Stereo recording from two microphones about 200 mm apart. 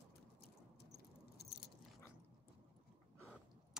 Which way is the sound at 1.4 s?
50° left (ahead or behind).